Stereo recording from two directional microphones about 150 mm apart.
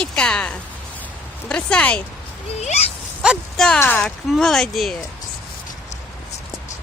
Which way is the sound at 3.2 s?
Centre (ahead or behind).